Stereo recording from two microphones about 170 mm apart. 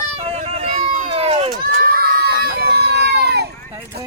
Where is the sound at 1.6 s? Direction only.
60° right (ahead or behind).